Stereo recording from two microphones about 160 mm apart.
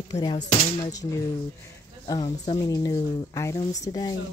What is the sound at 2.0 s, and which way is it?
Speech, 25° left (ahead or behind).